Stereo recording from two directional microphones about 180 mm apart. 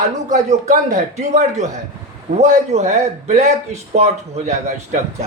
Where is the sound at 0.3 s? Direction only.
45° right (ahead or behind).